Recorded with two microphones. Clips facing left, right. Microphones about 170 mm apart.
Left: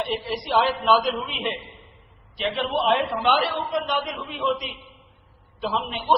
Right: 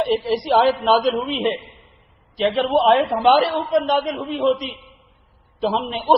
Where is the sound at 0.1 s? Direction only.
35° right (ahead or behind).